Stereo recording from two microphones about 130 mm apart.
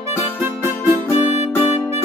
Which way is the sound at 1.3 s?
55° left (ahead or behind).